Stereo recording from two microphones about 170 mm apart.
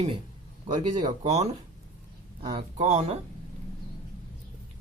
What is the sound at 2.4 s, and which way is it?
Speech, 25° right (ahead or behind).